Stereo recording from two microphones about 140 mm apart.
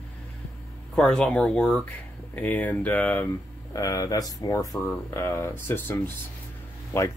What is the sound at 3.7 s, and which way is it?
Speech, 25° left (ahead or behind).